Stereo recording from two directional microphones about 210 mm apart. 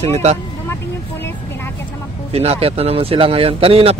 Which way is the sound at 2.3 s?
30° right (ahead or behind).